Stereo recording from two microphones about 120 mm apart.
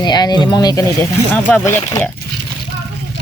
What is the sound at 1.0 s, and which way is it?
Speech, 15° left (ahead or behind).